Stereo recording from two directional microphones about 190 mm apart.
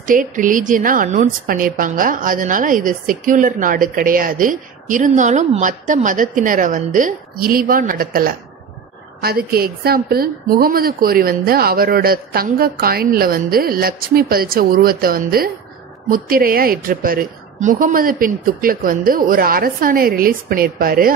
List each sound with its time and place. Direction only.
0.3 s a woman's voice: 45° right (ahead or behind)